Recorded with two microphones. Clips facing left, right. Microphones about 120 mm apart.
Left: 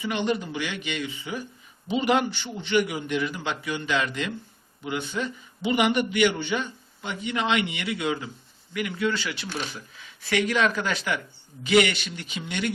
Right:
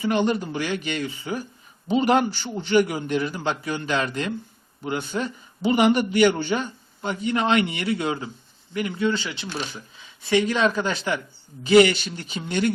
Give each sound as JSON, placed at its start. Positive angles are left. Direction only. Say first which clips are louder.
{"t": 0.0, "sound": "a man's voice", "louder": "right 4 dB", "side_deg": -40}
{"t": 9.5, "sound": "speech", "louder": "right 4 dB", "side_deg": 0}
{"t": 10.2, "sound": "a man's voice", "louder": "right 3 dB", "side_deg": -25}